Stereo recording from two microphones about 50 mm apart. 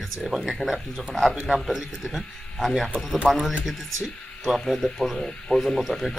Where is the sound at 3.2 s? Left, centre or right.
Centre.